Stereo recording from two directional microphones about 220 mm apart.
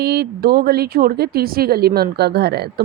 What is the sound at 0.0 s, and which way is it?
Speech, 45° right (ahead or behind).